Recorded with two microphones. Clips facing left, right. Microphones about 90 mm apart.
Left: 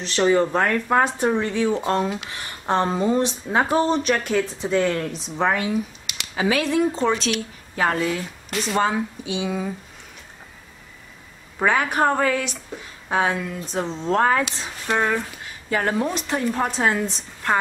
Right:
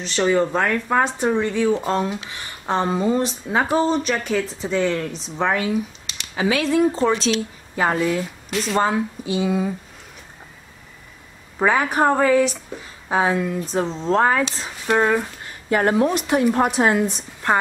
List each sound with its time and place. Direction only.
0.0 s speech: centre (ahead or behind)
7.2 s a woman's voice: 25° right (ahead or behind)
7.7 s speech: 5° right (ahead or behind)
11.5 s a woman's voice: 5° right (ahead or behind)